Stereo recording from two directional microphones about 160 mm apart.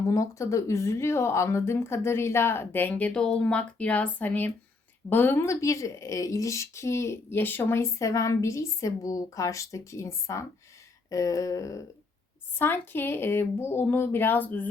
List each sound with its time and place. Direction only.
0.1 s speech: 20° left (ahead or behind)